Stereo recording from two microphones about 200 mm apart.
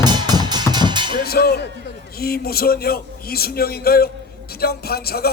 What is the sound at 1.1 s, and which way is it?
Music, 50° left (ahead or behind).